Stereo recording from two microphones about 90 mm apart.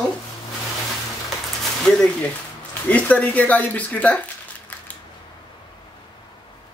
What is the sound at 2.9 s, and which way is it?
Speech, 15° left (ahead or behind).